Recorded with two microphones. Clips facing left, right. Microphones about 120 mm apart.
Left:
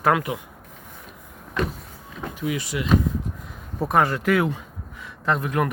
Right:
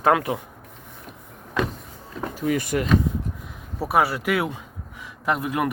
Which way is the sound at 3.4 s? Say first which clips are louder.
Left 2 dB; 5° right (ahead or behind).